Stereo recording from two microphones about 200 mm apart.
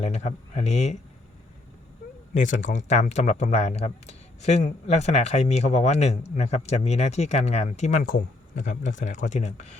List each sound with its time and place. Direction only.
0.0 s speech: 35° left (ahead or behind)
2.3 s speech: 40° left (ahead or behind)